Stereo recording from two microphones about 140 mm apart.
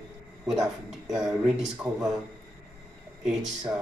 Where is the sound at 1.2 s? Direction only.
5° right (ahead or behind).